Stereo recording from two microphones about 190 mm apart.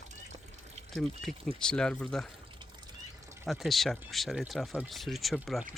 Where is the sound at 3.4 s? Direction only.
Centre (ahead or behind).